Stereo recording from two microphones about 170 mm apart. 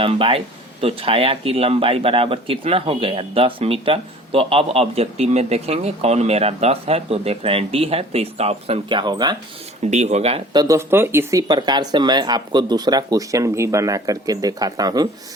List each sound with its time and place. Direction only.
0.0 s speech: 35° right (ahead or behind)
9.8 s speech: 40° right (ahead or behind)
10.5 s speech: 20° right (ahead or behind)